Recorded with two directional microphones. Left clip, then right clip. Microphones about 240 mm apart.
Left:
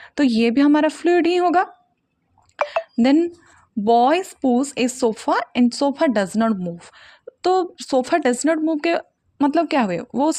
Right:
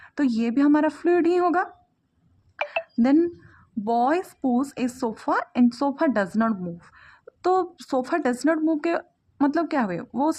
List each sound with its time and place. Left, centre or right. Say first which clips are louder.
0.0 s speech: left 7 dB; left
2.6 s a sound: left 4 dB; left
3.8 s speech: left 7 dB; left